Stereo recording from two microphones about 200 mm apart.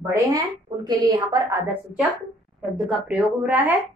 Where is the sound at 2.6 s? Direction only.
5° right (ahead or behind).